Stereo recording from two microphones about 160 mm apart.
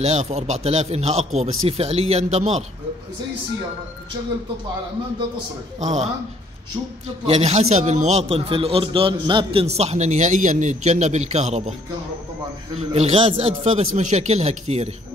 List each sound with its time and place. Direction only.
0.0 s a man's voice: 45° right (ahead or behind)
5.8 s a man's voice: 45° right (ahead or behind)
7.2 s a man's voice: 40° right (ahead or behind)
12.7 s speech: 40° right (ahead or behind)